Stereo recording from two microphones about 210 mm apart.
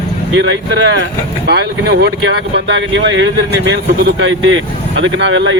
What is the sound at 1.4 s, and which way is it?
Speech, 50° right (ahead or behind).